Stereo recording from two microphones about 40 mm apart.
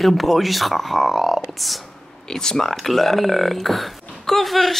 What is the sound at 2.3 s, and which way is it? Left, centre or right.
Speech, centre.